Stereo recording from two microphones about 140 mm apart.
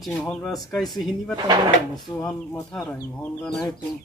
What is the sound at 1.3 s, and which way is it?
Speech, 30° right (ahead or behind).